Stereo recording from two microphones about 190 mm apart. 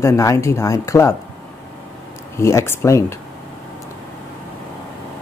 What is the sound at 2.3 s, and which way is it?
Speech, 15° left (ahead or behind).